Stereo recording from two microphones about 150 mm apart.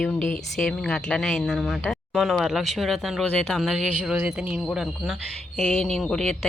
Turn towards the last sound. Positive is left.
turn(degrees=5)  # may be behind; listen again after turning